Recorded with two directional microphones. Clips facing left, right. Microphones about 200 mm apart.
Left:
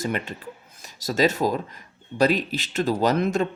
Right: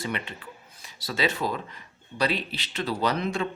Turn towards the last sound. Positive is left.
turn(degrees=45)  # may be behind; listen again after turning